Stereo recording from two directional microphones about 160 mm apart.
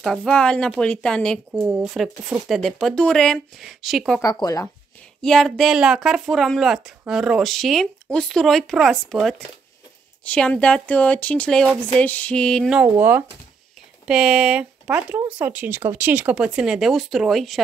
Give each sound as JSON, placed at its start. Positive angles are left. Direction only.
{"t": 0.0, "sound": "speech", "side_deg": 0}
{"t": 1.6, "sound": "speech", "side_deg": -10}
{"t": 4.2, "sound": "speech", "side_deg": 20}
{"t": 5.2, "sound": "speech", "side_deg": 5}
{"t": 12.8, "sound": "speech", "side_deg": -10}